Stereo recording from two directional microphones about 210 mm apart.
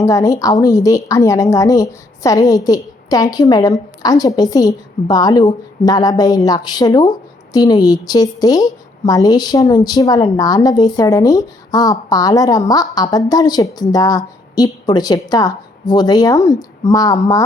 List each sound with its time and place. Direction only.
0.0 s a woman's voice: 15° left (ahead or behind)